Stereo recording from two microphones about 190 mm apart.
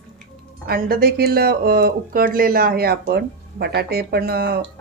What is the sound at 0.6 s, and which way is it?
Speech, 50° right (ahead or behind).